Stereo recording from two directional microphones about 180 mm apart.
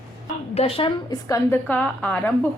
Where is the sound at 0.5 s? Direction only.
35° left (ahead or behind).